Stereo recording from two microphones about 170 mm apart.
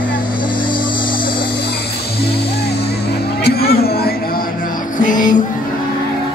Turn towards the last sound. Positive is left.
turn(degrees=50)  # may be behind; listen again after turning